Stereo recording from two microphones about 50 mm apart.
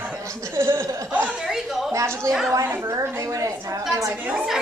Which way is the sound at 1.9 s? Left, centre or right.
Right.